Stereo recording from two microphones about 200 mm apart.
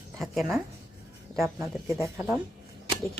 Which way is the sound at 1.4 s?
10° right (ahead or behind).